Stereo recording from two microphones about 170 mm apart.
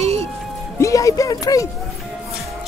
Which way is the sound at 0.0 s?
40° right (ahead or behind).